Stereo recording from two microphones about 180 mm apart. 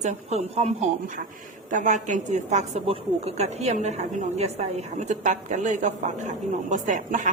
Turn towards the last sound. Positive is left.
turn(degrees=-45)  # may be behind; listen again after turning